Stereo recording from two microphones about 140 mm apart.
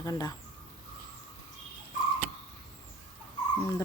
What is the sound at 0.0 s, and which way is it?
Speech, 25° left (ahead or behind).